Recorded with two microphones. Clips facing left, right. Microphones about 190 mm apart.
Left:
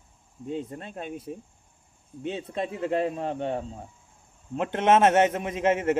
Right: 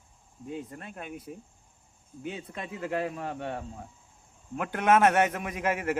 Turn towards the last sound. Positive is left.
turn(degrees=25)  # may be behind; listen again after turning